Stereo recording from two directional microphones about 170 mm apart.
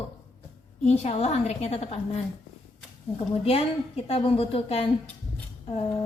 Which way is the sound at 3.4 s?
35° left (ahead or behind).